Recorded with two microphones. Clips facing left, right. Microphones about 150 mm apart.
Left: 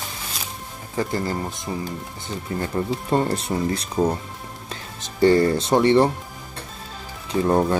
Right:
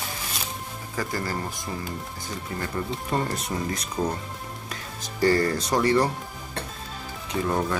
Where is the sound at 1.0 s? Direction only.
25° left (ahead or behind).